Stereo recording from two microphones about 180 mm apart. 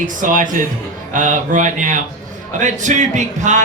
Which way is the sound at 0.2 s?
45° right (ahead or behind).